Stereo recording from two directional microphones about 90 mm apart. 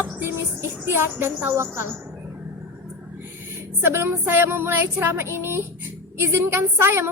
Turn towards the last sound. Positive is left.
turn(degrees=-30)  # may be behind; listen again after turning